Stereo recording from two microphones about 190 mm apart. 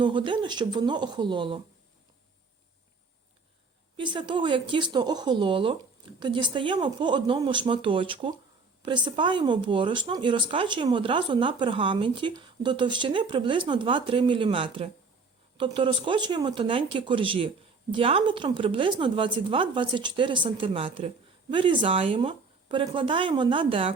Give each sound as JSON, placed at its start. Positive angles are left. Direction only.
{"t": 0.0, "sound": "speech", "side_deg": -25}
{"t": 3.9, "sound": "speech", "side_deg": -25}